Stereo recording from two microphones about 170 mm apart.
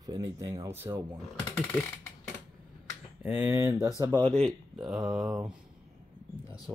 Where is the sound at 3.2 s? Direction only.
10° right (ahead or behind).